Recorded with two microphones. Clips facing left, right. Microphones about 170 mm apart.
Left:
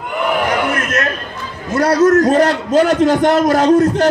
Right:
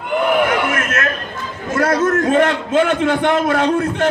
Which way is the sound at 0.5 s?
35° left (ahead or behind).